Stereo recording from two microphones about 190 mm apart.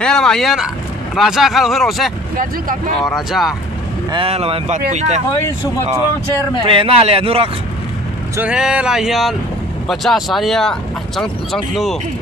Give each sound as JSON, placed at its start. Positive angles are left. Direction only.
{"t": 0.0, "sound": "speech", "side_deg": 5}
{"t": 4.1, "sound": "speech", "side_deg": -30}
{"t": 6.6, "sound": "speech", "side_deg": -30}
{"t": 8.4, "sound": "speech", "side_deg": -5}